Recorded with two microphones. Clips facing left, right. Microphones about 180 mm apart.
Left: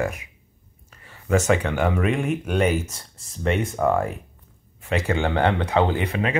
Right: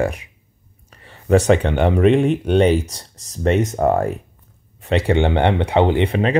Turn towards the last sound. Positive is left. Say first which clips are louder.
# right 7 dB
turn(degrees=-30)  # may be behind; listen again after turning